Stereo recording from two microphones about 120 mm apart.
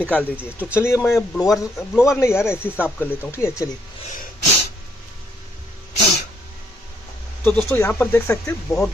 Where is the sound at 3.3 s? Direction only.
25° left (ahead or behind).